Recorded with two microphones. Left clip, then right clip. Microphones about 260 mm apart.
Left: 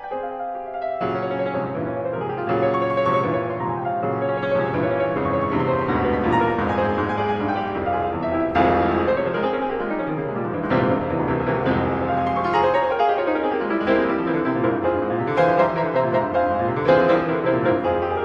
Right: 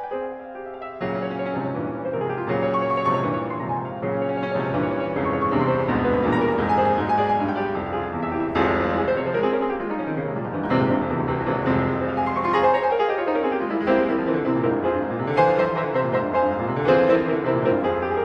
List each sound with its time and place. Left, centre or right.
16.9 s music: centre